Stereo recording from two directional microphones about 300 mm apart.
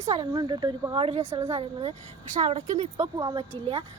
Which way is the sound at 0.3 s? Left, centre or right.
Centre.